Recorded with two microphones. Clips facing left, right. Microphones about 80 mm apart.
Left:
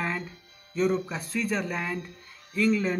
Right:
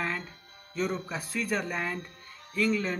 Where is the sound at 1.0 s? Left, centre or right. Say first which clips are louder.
Left 2 dB; centre.